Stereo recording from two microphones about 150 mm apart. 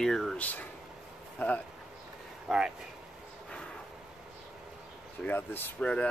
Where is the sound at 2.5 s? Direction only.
Centre (ahead or behind).